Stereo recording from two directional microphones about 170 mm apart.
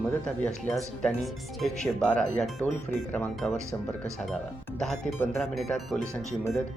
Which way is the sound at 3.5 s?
15° right (ahead or behind).